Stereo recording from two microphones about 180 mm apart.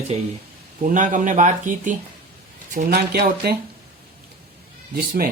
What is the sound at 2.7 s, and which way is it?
Speech, 60° right (ahead or behind).